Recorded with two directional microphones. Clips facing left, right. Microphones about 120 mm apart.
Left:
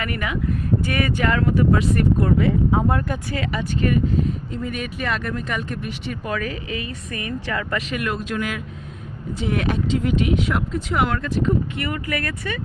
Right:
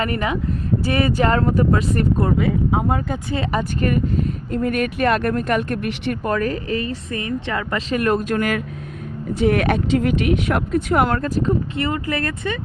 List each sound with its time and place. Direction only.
0.0 s a woman's voice: 30° right (ahead or behind)
2.4 s speech: 15° right (ahead or behind)
3.4 s speech: 40° right (ahead or behind); by 6.3 s 60° right (ahead or behind)
6.3 s a woman's voice: 45° right (ahead or behind)
9.3 s speech: 60° right (ahead or behind); by 12.5 s 25° right (ahead or behind)